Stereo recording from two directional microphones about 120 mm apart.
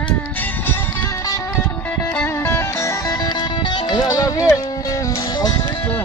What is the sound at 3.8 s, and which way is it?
Music, 35° left (ahead or behind).